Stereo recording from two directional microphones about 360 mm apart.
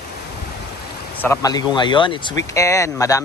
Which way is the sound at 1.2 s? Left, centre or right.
Centre.